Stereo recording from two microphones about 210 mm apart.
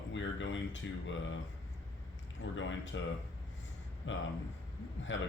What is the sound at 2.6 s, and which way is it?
Speech, 65° left (ahead or behind).